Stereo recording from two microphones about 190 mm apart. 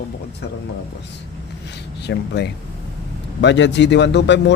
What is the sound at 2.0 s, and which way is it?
A man's voice, 60° left (ahead or behind).